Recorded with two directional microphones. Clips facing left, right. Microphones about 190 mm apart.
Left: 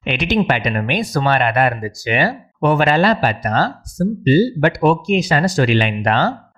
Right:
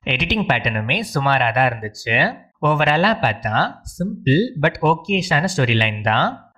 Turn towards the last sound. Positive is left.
turn(degrees=45)  # may be behind; listen again after turning